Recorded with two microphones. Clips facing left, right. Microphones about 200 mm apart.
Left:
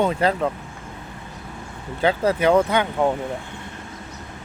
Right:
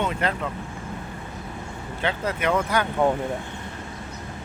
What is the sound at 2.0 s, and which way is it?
Speech, 35° left (ahead or behind).